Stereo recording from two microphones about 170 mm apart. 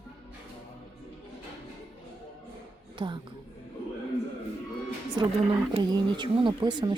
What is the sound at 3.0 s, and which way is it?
Speech, 30° right (ahead or behind).